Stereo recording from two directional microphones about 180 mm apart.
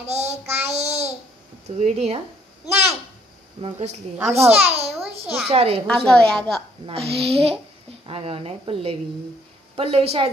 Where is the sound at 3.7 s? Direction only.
40° right (ahead or behind).